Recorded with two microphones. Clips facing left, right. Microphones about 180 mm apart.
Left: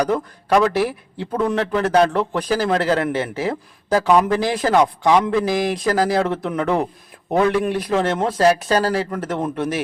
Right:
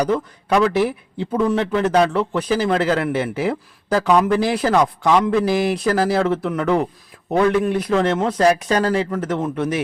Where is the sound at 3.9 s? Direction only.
10° left (ahead or behind).